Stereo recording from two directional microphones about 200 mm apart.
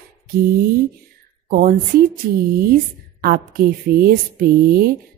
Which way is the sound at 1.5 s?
40° right (ahead or behind).